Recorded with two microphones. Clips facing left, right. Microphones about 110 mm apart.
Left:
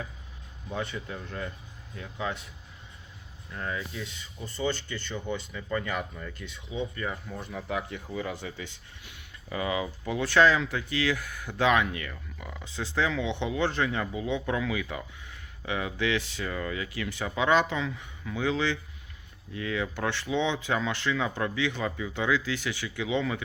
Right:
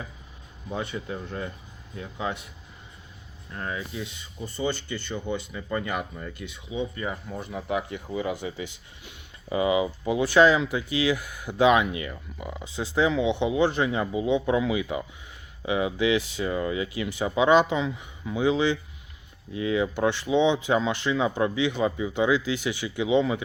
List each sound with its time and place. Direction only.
0.7 s speech: 15° right (ahead or behind)
3.7 s speech: 15° right (ahead or behind)